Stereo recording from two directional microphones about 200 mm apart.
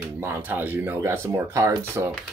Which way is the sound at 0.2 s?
10° right (ahead or behind).